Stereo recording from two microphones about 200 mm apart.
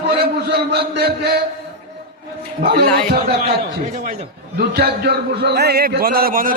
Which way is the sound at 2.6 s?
50° right (ahead or behind).